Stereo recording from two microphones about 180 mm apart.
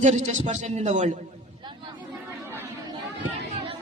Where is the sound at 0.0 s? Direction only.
40° right (ahead or behind).